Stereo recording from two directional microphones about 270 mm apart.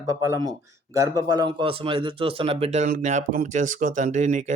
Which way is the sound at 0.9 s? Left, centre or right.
Centre.